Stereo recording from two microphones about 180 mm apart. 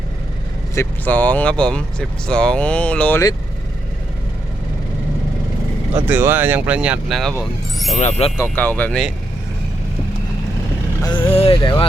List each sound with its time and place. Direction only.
0.8 s speech: 10° left (ahead or behind)
6.1 s speech: 10° right (ahead or behind)
7.9 s speech: 40° left (ahead or behind)
8.4 s speech: 10° left (ahead or behind)
11.0 s speech: 25° left (ahead or behind)